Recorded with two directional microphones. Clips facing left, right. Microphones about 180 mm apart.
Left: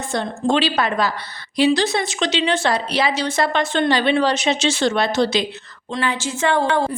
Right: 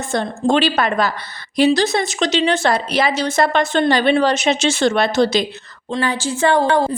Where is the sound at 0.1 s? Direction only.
50° right (ahead or behind).